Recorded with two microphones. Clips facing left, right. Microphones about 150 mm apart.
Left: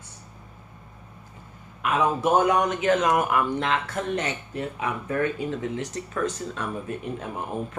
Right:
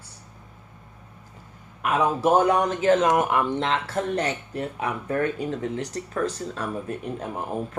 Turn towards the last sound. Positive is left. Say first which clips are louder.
# right 1 dB
turn(degrees=-40)  # may be behind; listen again after turning